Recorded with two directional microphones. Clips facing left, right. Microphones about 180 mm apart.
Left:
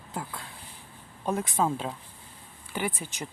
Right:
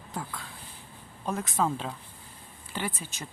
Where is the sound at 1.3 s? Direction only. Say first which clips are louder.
Left 2 dB; 10° left (ahead or behind).